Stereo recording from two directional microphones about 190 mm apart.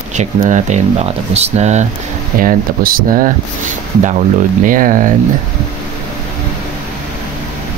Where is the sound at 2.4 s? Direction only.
50° right (ahead or behind).